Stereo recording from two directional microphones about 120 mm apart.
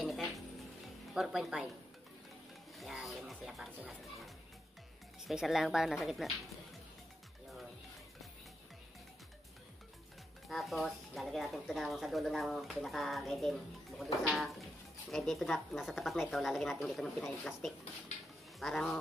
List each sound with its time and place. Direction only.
0.0 s music: centre (ahead or behind)
1.1 s speech: 5° right (ahead or behind)
2.8 s speech: centre (ahead or behind)
5.3 s speech: centre (ahead or behind)
10.5 s speech: centre (ahead or behind)